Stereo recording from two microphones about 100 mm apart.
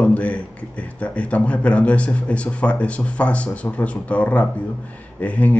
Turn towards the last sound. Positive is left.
turn(degrees=15)  # may be behind; listen again after turning